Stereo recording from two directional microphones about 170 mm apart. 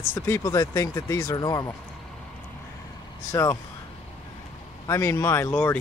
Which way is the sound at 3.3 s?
20° left (ahead or behind).